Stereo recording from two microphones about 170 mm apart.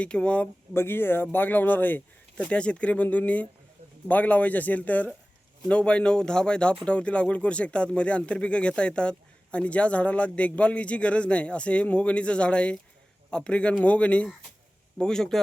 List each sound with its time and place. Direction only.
0.0 s speech: 5° left (ahead or behind)